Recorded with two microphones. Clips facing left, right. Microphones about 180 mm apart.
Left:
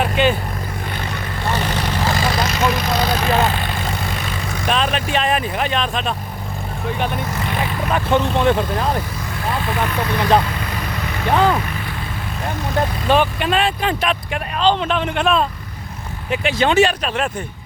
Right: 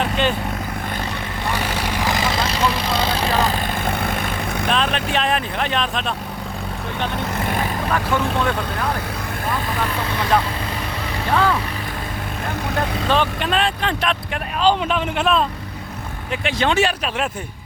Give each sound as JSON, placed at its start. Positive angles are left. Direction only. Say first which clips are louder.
{"t": 0.0, "sound": "vehicle", "louder": "left 3 dB", "side_deg": 5}
{"t": 1.5, "sound": "vehicle", "louder": "left 2 dB", "side_deg": -10}
{"t": 3.8, "sound": "vehicle", "louder": "right 2 dB", "side_deg": -55}
{"t": 4.7, "sound": "speech", "louder": "left 2 dB", "side_deg": 5}
{"t": 7.9, "sound": "speech", "louder": "left 4 dB", "side_deg": 25}
{"t": 10.2, "sound": "speech", "louder": "left 3 dB", "side_deg": 20}
{"t": 13.1, "sound": "speech", "louder": "left 4 dB", "side_deg": 10}
{"t": 14.6, "sound": "speech", "louder": "even", "side_deg": -5}